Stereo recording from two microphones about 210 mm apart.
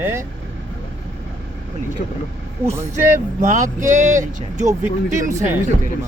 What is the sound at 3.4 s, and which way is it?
Speech, 35° right (ahead or behind).